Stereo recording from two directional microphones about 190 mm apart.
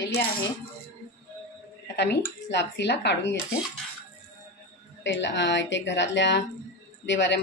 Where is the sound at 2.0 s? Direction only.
60° left (ahead or behind).